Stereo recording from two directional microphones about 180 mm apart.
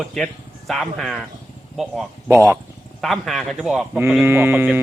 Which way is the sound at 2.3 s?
10° right (ahead or behind).